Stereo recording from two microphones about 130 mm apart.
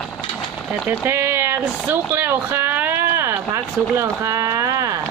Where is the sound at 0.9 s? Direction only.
20° right (ahead or behind).